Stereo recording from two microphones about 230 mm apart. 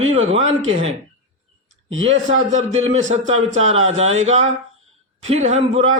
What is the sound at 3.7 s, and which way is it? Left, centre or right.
Speech, right.